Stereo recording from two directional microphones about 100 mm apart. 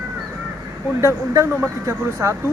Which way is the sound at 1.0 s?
25° right (ahead or behind).